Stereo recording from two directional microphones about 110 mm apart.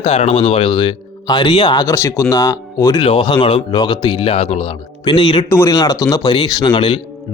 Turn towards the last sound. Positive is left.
turn(degrees=45)  # may be behind; listen again after turning